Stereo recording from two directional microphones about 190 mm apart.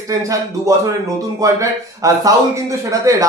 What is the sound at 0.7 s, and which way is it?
A man's voice, 15° right (ahead or behind).